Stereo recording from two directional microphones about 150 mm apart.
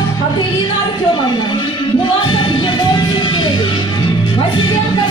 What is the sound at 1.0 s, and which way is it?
Music, 30° left (ahead or behind).